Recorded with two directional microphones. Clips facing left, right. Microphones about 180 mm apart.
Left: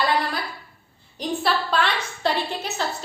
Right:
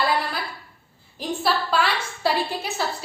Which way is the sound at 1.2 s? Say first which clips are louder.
Even; 5° right (ahead or behind).